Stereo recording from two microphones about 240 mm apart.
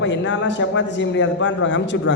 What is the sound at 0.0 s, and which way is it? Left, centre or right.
A man's voice, left.